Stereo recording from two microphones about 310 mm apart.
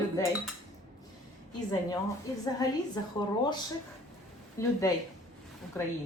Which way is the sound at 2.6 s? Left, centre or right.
Centre.